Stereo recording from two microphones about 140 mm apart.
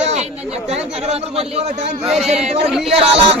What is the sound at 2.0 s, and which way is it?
Speech, centre (ahead or behind).